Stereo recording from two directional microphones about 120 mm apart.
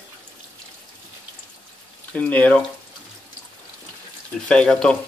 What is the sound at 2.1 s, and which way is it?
Speech, 15° left (ahead or behind).